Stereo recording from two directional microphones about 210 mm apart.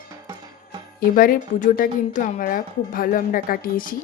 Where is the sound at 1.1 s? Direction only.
40° left (ahead or behind).